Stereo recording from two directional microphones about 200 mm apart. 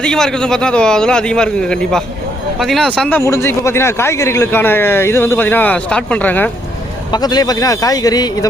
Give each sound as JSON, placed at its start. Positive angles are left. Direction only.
{"t": 0.0, "sound": "a man's voice", "side_deg": 5}
{"t": 7.1, "sound": "speech", "side_deg": 20}